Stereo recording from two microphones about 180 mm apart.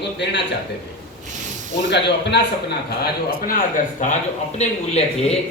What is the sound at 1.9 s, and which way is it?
Speech, 70° left (ahead or behind).